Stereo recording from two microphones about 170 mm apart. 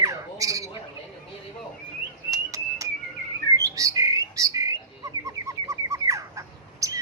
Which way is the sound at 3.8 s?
20° right (ahead or behind).